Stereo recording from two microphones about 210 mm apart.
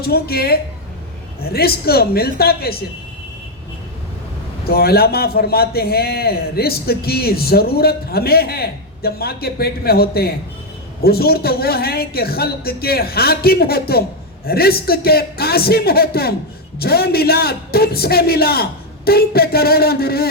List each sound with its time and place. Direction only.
0.0 s a man's voice: 45° left (ahead or behind)
4.6 s a man's voice: 45° left (ahead or behind)